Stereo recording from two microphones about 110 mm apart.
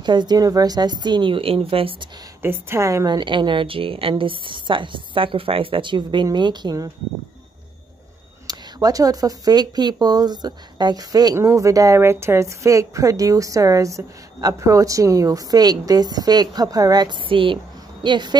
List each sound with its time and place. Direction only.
0.0 s a woman's voice: 40° right (ahead or behind)
2.4 s a woman's voice: 25° right (ahead or behind)
3.1 s a woman's voice: 45° right (ahead or behind)
8.5 s a woman's voice: 35° right (ahead or behind)